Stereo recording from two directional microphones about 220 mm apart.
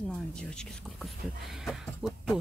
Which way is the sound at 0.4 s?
Centre (ahead or behind).